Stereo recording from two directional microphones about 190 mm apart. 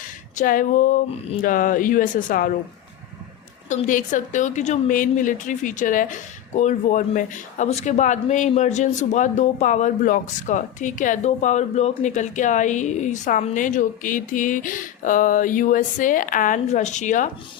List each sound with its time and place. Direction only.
0.0 s speech: 45° left (ahead or behind)
3.7 s a woman's voice: 40° left (ahead or behind)